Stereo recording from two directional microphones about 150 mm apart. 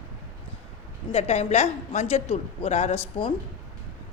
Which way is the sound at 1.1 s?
45° left (ahead or behind).